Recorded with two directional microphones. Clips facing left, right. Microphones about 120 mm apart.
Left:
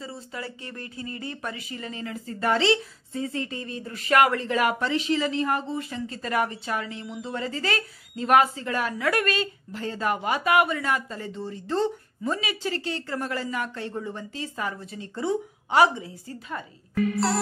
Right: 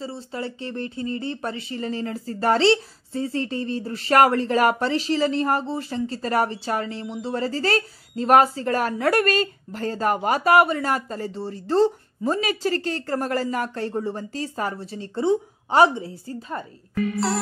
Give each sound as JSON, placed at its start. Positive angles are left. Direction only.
{"t": 0.0, "sound": "speech", "side_deg": -30}